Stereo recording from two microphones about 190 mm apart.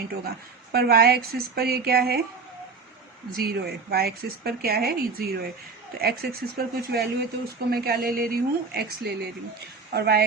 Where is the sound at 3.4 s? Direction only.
55° right (ahead or behind).